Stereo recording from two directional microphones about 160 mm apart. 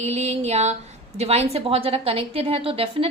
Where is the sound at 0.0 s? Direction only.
45° right (ahead or behind).